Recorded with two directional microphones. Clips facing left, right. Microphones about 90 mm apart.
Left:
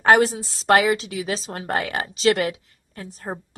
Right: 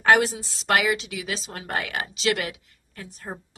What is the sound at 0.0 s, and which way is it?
A woman's voice, 35° left (ahead or behind).